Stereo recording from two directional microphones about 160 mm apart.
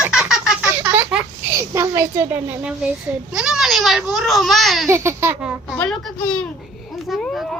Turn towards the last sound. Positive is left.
turn(degrees=5)  # may be behind; listen again after turning